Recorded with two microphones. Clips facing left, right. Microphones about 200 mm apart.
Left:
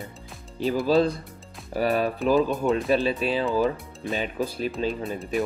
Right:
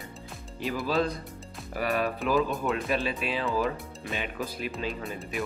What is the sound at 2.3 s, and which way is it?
Music, centre (ahead or behind).